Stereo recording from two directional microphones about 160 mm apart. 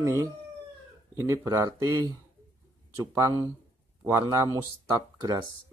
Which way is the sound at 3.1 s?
20° right (ahead or behind).